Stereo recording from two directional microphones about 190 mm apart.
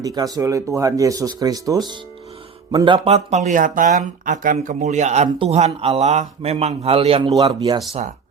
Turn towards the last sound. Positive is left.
turn(degrees=-20)  # may be behind; listen again after turning